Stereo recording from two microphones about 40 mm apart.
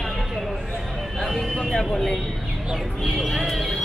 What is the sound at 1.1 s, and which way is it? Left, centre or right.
Vehicle, centre.